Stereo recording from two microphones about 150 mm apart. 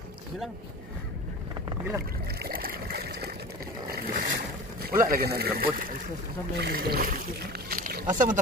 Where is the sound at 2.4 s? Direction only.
75° right (ahead or behind).